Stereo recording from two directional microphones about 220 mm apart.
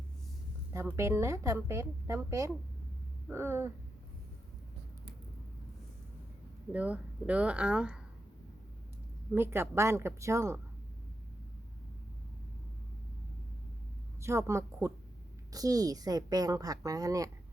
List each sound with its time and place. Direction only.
0.9 s speech: 10° right (ahead or behind)
6.7 s speech: 5° right (ahead or behind)
9.3 s speech: 10° right (ahead or behind)
14.2 s speech: 10° right (ahead or behind)